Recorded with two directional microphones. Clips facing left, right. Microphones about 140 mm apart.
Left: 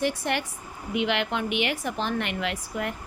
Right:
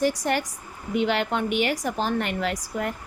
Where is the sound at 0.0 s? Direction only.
40° right (ahead or behind).